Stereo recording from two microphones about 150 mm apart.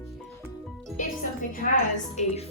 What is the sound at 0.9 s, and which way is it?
A woman's voice, 60° left (ahead or behind).